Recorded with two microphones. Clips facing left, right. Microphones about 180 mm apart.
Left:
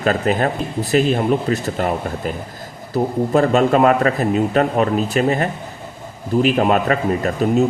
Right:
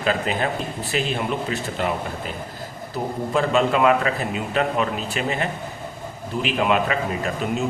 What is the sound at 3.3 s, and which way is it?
Speech, 45° left (ahead or behind).